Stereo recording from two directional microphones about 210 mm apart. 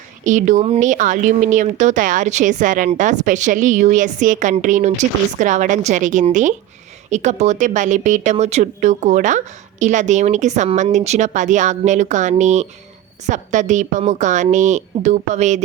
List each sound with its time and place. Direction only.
0.3 s speech: 35° right (ahead or behind)